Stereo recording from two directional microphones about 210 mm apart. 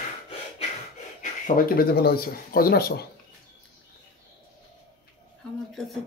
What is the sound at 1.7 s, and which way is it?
Speech, 45° left (ahead or behind).